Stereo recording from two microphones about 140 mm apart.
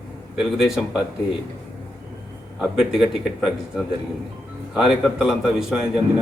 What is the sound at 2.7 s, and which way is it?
Speech, 5° right (ahead or behind).